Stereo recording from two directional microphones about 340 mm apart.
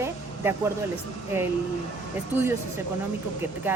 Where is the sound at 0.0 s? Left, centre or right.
Centre.